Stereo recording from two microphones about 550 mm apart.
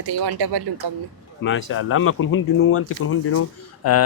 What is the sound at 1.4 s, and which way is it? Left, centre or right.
Speech, left.